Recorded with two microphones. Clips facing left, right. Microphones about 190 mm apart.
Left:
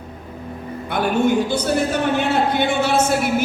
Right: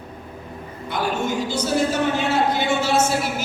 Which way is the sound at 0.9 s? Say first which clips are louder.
Left 6 dB; 60° left (ahead or behind).